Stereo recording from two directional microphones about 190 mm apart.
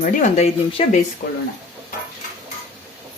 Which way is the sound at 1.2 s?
45° left (ahead or behind).